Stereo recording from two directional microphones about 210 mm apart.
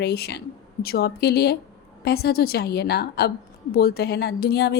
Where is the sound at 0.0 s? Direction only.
50° left (ahead or behind).